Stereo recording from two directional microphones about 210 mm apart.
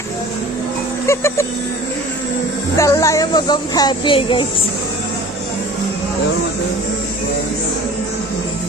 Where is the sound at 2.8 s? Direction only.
15° left (ahead or behind).